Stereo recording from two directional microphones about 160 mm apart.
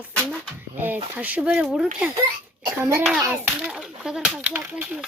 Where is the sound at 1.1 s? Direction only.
10° right (ahead or behind).